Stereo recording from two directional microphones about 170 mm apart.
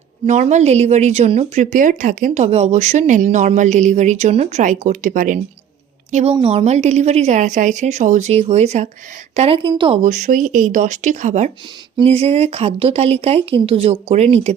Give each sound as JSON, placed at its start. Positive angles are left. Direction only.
{"t": 0.3, "sound": "a woman's voice", "side_deg": -45}
{"t": 9.6, "sound": "speech", "side_deg": -30}
{"t": 10.0, "sound": "speech", "side_deg": -50}
{"t": 11.9, "sound": "a woman's voice", "side_deg": -35}